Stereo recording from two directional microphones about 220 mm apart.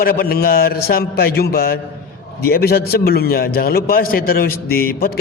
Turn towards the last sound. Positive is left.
turn(degrees=45)  # may be behind; listen again after turning